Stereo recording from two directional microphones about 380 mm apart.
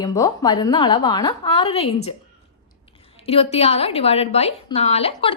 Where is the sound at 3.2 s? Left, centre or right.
Centre.